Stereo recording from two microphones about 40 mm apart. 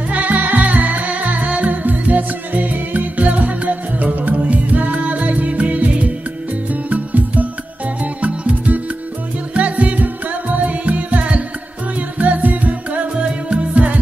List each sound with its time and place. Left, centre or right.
0.1 s music: right